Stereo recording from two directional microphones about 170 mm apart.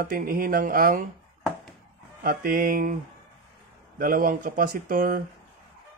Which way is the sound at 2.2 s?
60° right (ahead or behind).